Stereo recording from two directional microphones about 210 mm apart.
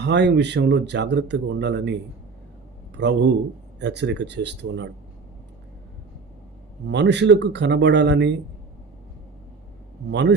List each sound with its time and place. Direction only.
0.0 s speech: 55° right (ahead or behind)
6.8 s speech: 55° right (ahead or behind)
10.1 s speech: 55° right (ahead or behind)